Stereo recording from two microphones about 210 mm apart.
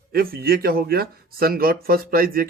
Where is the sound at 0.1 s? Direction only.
45° right (ahead or behind).